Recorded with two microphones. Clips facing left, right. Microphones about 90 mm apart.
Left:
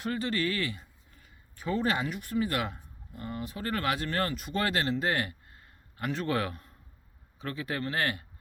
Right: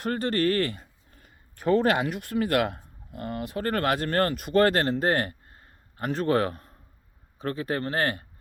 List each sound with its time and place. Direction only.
0.0 s speech: 50° right (ahead or behind)